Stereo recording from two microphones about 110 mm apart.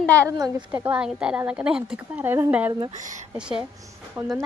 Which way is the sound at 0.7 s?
15° right (ahead or behind).